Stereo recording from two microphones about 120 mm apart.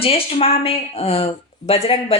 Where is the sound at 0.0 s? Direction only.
50° left (ahead or behind).